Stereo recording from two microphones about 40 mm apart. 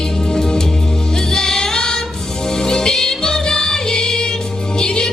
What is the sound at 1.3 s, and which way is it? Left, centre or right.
Music, centre.